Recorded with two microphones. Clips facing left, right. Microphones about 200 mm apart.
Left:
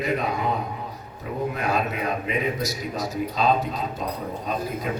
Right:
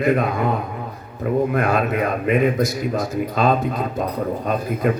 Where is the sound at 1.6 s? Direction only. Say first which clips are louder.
Right 6 dB; 55° right (ahead or behind).